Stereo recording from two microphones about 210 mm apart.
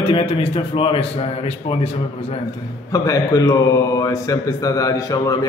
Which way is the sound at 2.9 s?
15° left (ahead or behind).